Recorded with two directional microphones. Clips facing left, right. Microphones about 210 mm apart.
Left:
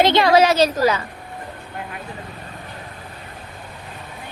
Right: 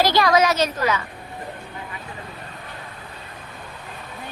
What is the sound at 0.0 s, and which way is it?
A woman's voice, 25° left (ahead or behind).